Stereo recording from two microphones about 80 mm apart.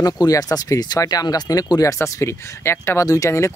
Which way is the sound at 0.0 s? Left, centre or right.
Left.